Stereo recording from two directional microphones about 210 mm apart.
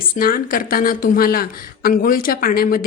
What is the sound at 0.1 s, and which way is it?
A woman's voice, 45° left (ahead or behind).